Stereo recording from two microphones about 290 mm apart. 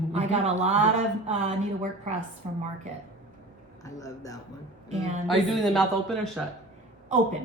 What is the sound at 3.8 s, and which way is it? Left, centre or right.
Speech, centre.